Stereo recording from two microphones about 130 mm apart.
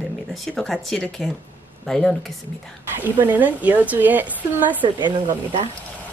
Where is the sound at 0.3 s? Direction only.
Centre (ahead or behind).